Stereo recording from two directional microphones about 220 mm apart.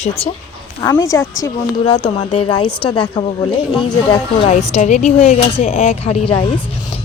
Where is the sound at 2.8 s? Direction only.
25° left (ahead or behind).